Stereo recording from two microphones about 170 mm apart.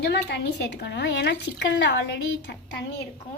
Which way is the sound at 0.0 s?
80° left.